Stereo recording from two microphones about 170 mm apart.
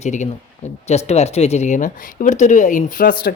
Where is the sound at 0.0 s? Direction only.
45° left (ahead or behind).